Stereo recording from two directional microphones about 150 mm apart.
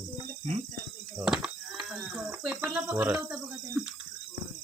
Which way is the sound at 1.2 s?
5° right (ahead or behind).